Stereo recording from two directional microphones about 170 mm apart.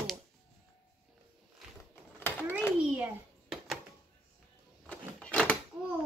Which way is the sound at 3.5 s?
Centre (ahead or behind).